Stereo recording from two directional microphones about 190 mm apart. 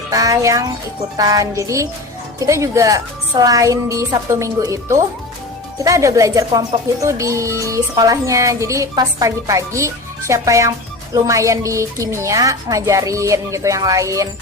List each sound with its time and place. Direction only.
0.1 s speech: 15° right (ahead or behind)